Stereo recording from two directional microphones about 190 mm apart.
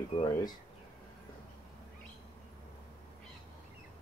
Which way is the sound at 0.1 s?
25° left (ahead or behind).